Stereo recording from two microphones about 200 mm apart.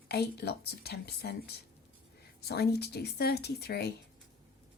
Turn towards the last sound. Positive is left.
turn(degrees=55)  # may be behind; listen again after turning